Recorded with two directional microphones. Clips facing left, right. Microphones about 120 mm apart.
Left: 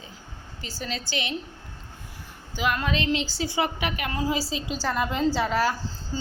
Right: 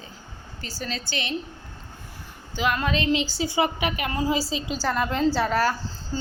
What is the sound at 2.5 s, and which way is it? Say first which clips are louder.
A woman's voice: right 2 dB; centre (ahead or behind).